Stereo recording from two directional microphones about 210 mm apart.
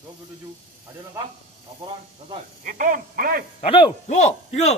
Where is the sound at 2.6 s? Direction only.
40° right (ahead or behind).